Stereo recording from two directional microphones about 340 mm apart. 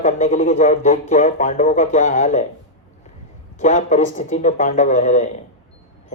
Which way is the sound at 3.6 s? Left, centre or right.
Left.